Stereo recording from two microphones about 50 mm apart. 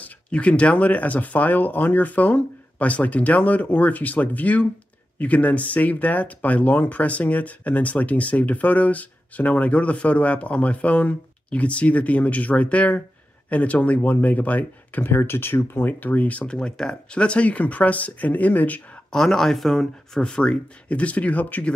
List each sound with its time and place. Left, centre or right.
0.0 s speech: left
15.0 s speech: left
15.9 s speech: left
16.4 s speech: centre; by 18.8 s left
19.1 s speech: centre
20.2 s speech: centre; by 21.6 s left